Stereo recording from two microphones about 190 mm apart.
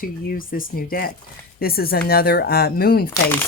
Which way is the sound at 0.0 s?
45° left (ahead or behind).